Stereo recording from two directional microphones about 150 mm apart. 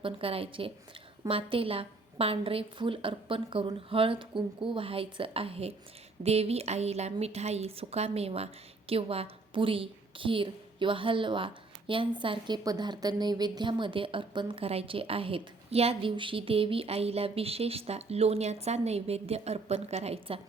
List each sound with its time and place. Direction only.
0.0 s a woman's voice: 40° right (ahead or behind)